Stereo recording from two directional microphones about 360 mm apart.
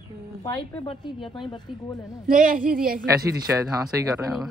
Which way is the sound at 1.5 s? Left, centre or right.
Centre.